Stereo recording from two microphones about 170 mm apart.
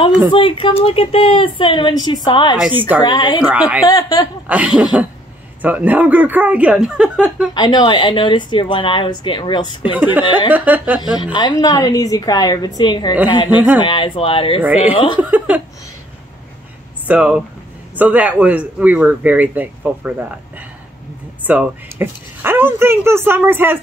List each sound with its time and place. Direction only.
0.3 s a woman's voice: 30° left (ahead or behind)
2.5 s speech: 5° right (ahead or behind)
3.0 s speech: 25° left (ahead or behind)
3.3 s a man's voice: 5° right (ahead or behind)
3.8 s speech: 25° left (ahead or behind)
4.5 s a man's voice: 5° right (ahead or behind)
7.5 s speech: 25° left (ahead or behind)
9.9 s a man's voice: 10° right (ahead or behind)
10.2 s speech: 25° left (ahead or behind)
10.5 s a man's voice: 10° right (ahead or behind)
11.3 s a woman's voice: 25° left (ahead or behind)
15.1 s chuckle: 10° right (ahead or behind)
17.1 s a man's voice: 5° right (ahead or behind)